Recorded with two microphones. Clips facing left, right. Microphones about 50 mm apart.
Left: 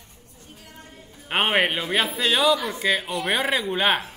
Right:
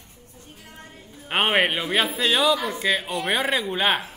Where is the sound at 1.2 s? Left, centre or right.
Centre.